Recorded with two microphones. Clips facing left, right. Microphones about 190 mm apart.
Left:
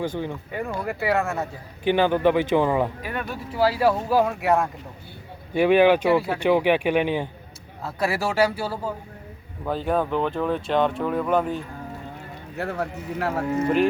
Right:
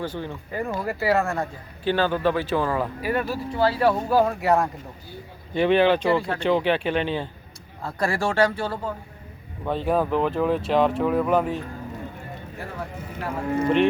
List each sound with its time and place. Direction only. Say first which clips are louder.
0.5 s speech: right 3 dB; centre (ahead or behind)
1.8 s speech: left 3 dB; 15° left (ahead or behind)
3.0 s speech: right 5 dB; 5° right (ahead or behind)
12.5 s speech: left 7 dB; 70° left (ahead or behind)